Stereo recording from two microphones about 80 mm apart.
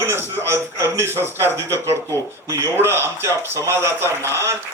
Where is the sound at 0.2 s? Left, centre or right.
Right.